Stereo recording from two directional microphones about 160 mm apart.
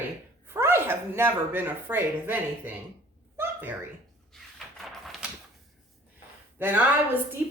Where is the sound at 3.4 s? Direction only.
10° right (ahead or behind).